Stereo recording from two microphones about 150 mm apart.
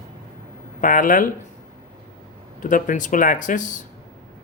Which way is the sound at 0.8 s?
65° left (ahead or behind).